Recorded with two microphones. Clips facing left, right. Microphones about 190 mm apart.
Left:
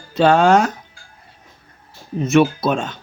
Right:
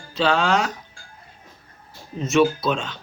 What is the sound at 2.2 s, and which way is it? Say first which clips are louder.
Speech: left 3 dB; 55° left (ahead or behind).